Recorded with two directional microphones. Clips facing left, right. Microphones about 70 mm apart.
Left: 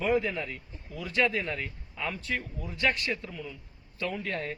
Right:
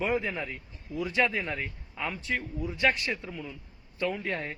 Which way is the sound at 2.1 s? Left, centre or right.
Centre.